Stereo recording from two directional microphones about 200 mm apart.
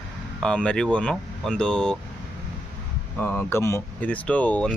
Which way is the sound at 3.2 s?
10° left (ahead or behind).